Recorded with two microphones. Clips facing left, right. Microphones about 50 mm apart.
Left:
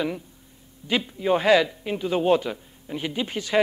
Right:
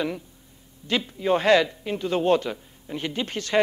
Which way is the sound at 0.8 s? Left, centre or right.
Centre.